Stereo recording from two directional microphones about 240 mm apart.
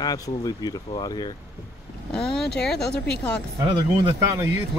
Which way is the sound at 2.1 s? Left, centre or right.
Centre.